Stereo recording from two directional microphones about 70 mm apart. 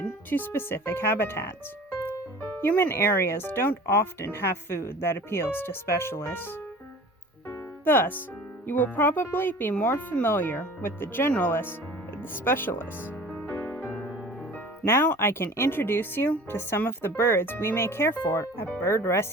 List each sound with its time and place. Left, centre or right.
0.0 s speech: left
7.5 s music: left
8.6 s speech: left
13.7 s music: left
15.2 s speech: left